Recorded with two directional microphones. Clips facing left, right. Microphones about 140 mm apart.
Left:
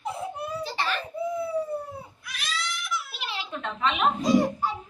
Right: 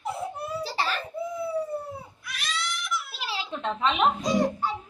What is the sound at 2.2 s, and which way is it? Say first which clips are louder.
Baby cry: right 1 dB; centre (ahead or behind).